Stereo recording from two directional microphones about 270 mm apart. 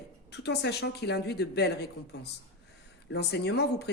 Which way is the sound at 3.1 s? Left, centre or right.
Left.